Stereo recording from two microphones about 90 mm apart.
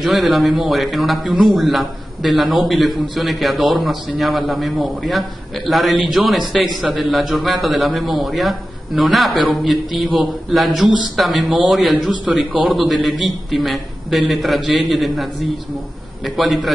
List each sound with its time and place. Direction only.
0.0 s a man's voice: centre (ahead or behind)
16.3 s a man's voice: centre (ahead or behind)